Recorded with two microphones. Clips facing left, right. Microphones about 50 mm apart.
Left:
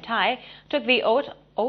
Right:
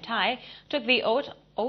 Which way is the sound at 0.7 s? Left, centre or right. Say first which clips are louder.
Left 4 dB; centre.